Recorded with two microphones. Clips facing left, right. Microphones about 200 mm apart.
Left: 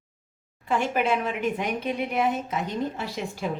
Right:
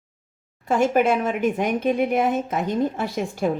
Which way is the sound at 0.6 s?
45° right (ahead or behind).